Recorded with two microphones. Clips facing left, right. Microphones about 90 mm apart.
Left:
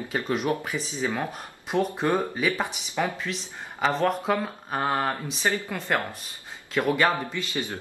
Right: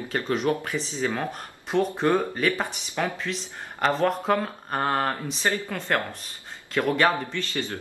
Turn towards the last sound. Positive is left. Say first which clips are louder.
# right 1 dB
turn(degrees=15)  # may be behind; listen again after turning